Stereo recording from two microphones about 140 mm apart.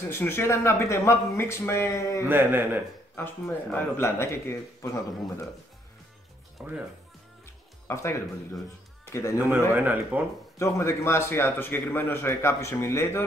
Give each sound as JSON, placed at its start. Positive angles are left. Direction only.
{"t": 0.1, "sound": "speech", "side_deg": 15}
{"t": 2.2, "sound": "speech", "side_deg": -15}
{"t": 3.2, "sound": "a man's voice", "side_deg": 15}
{"t": 6.6, "sound": "speech", "side_deg": -5}
{"t": 7.9, "sound": "speech", "side_deg": 20}
{"t": 9.4, "sound": "speech", "side_deg": -10}
{"t": 10.6, "sound": "a man's voice", "side_deg": 20}